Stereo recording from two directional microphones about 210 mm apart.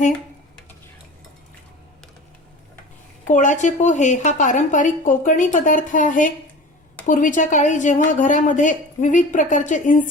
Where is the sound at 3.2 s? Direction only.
35° left (ahead or behind).